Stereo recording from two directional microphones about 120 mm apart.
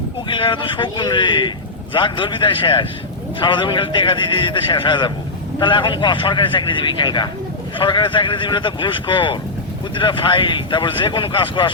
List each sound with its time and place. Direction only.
0.3 s a man's voice: 45° left (ahead or behind)